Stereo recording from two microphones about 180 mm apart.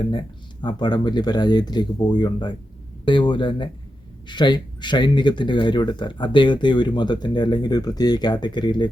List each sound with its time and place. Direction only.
0.1 s speech: 25° left (ahead or behind)